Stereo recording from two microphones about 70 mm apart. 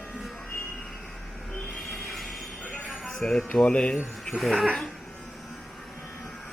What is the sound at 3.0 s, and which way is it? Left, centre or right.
Music, centre.